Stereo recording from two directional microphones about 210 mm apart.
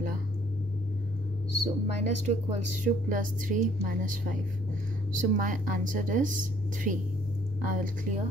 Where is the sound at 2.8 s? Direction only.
40° right (ahead or behind).